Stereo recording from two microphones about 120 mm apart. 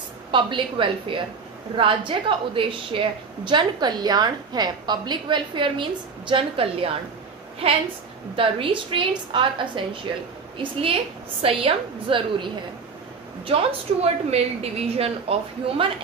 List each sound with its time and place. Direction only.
0.3 s a woman's voice: 45° right (ahead or behind)
8.4 s a woman's voice: 45° right (ahead or behind)
13.5 s a woman's voice: 50° right (ahead or behind)